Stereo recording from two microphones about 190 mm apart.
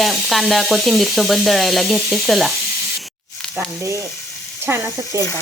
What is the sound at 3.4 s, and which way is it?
Sizzle, centre (ahead or behind).